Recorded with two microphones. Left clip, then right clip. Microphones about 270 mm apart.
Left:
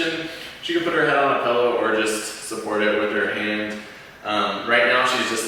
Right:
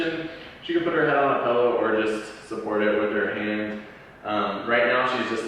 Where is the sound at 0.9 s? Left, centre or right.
Centre.